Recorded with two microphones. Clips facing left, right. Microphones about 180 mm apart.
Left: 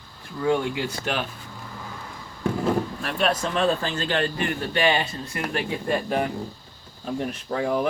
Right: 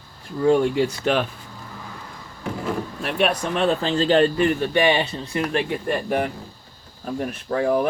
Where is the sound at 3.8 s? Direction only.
30° right (ahead or behind).